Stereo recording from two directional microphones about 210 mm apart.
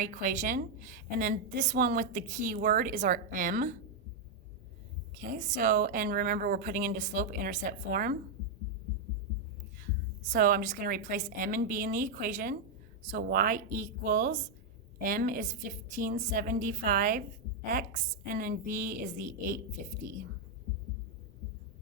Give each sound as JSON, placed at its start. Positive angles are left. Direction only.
{"t": 0.0, "sound": "a woman's voice", "side_deg": -40}
{"t": 5.2, "sound": "a woman's voice", "side_deg": -40}
{"t": 10.3, "sound": "a woman's voice", "side_deg": -40}